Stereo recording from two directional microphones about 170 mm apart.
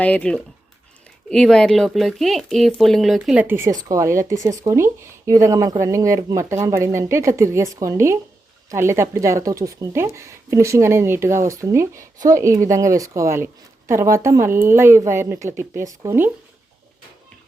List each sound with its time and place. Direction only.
0.0 s speech: 5° left (ahead or behind)
3.4 s speech: 15° right (ahead or behind)